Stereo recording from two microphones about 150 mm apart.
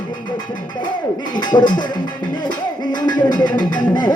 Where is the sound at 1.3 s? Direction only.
30° left (ahead or behind).